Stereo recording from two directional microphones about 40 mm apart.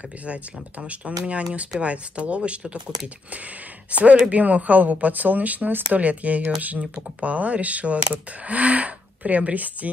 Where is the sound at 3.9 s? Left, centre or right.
Right.